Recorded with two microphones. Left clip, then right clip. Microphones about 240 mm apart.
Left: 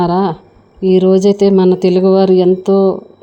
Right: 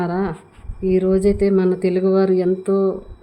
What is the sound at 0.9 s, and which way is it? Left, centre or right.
Speech, left.